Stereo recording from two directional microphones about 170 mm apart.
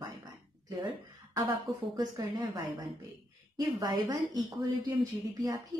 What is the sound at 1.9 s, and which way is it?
Speech, 25° right (ahead or behind).